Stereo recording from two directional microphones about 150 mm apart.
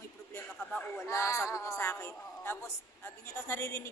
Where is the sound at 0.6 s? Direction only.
10° left (ahead or behind).